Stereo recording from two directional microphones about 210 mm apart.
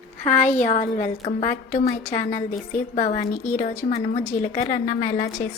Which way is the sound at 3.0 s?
35° left (ahead or behind).